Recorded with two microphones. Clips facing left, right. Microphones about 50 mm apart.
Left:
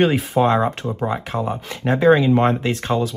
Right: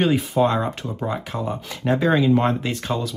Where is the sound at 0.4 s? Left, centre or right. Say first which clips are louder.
Left 5 dB; left.